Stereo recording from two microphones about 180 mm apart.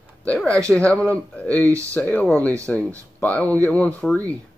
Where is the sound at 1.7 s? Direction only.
15° right (ahead or behind).